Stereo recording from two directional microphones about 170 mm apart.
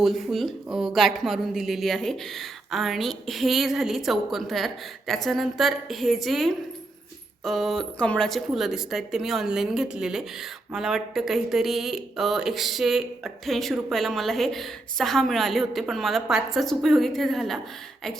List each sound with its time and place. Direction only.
0.0 s speech: centre (ahead or behind)